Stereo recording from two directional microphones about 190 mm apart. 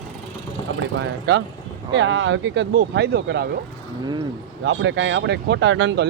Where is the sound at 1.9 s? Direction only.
75° right (ahead or behind); by 3.4 s 55° right (ahead or behind).